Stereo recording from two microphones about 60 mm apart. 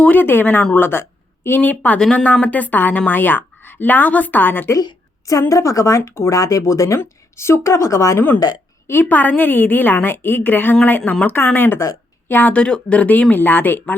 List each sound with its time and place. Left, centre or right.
0.0 s a woman's voice: left
4.7 s a woman's voice: left
6.1 s speech: left
6.3 s speech: left
8.9 s a woman's voice: left